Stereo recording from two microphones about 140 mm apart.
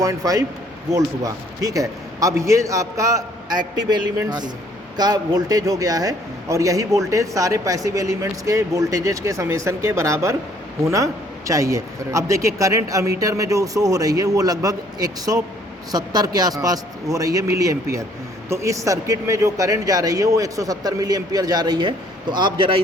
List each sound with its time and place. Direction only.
0.0 s a man's voice: 25° right (ahead or behind)